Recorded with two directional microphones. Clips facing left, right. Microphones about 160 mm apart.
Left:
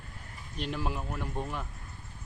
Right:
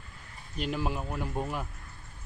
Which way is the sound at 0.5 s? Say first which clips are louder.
Right 2 dB; centre (ahead or behind).